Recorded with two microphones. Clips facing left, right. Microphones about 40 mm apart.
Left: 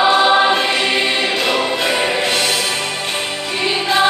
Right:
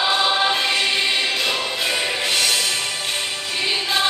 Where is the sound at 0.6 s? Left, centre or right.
Left.